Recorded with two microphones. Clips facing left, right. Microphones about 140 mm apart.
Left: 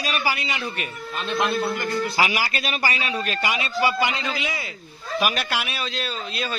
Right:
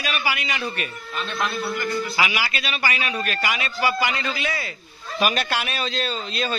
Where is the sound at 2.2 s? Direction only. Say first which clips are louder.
Left 1 dB; 40° left (ahead or behind); by 4.7 s 15° left (ahead or behind).